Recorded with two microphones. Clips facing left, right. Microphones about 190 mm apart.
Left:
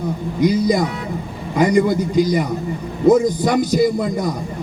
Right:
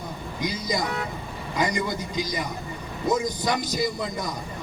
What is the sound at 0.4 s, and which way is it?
Speech, 60° left (ahead or behind).